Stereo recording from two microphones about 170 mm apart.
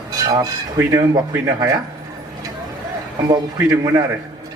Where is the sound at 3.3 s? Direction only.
20° right (ahead or behind).